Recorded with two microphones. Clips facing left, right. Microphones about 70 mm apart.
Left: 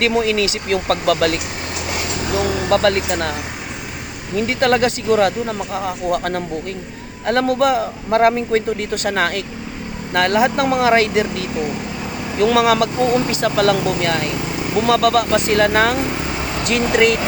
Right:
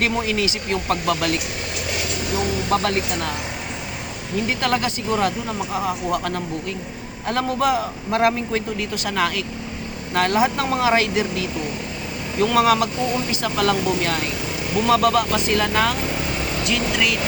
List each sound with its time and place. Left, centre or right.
0.0 s speech: left
2.6 s a man's voice: left
4.4 s a man's voice: left